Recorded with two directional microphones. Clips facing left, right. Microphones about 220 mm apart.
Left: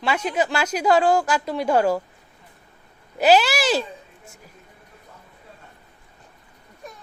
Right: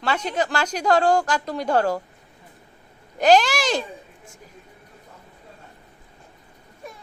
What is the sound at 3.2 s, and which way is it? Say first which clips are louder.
Speech: even; 5° left (ahead or behind).